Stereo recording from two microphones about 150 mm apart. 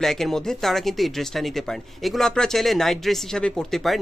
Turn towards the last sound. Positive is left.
turn(degrees=0)  # may be behind; listen again after turning